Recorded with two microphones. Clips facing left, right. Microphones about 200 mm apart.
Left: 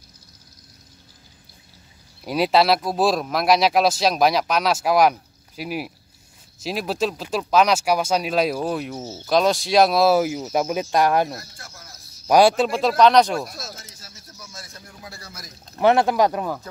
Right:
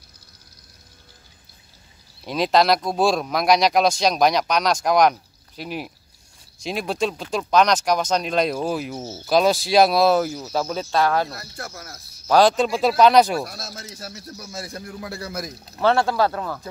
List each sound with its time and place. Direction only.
2.2 s speech: 10° left (ahead or behind)
11.3 s a man's voice: 65° right (ahead or behind)
12.3 s speech: 10° left (ahead or behind); by 13.4 s 5° right (ahead or behind)
13.9 s a man's voice: 65° right (ahead or behind)
15.8 s speech: 15° left (ahead or behind)